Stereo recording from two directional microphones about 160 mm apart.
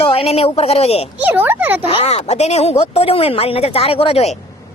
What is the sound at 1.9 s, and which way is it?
Speech, 40° left (ahead or behind).